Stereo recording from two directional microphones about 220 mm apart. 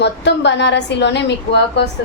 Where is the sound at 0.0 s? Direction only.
50° left (ahead or behind).